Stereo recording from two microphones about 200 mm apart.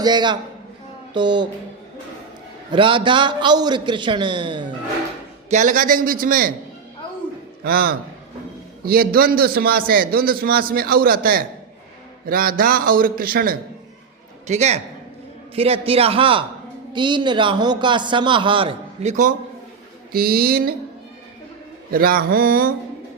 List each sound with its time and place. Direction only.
0.0 s a man's voice: 20° right (ahead or behind)
2.7 s a man's voice: 25° right (ahead or behind)
5.5 s a man's voice: 40° right (ahead or behind)
7.6 s a man's voice: 50° right (ahead or behind)
14.4 s a man's voice: 35° right (ahead or behind)
20.1 s a man's voice: 50° right (ahead or behind)
21.9 s a man's voice: 45° right (ahead or behind)